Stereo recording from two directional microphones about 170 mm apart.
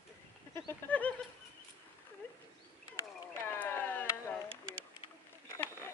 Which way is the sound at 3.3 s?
10° left (ahead or behind).